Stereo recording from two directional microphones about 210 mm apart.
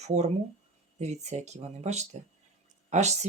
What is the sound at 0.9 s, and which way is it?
Speech, 35° right (ahead or behind).